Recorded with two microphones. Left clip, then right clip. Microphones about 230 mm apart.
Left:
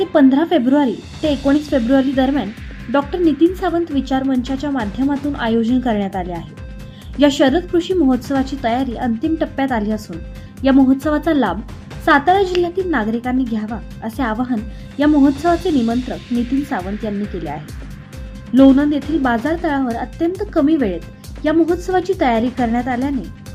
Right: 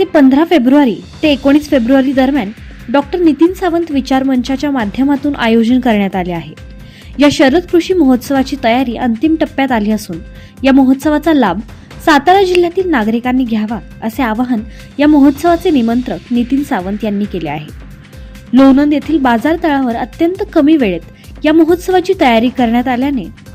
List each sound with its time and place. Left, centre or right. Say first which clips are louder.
0.0 s a woman's voice: right 5 dB; right